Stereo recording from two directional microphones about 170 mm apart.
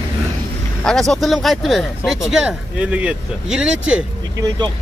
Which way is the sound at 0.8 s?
Centre (ahead or behind).